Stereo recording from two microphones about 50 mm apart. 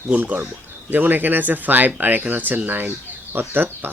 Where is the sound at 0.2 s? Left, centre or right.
Right.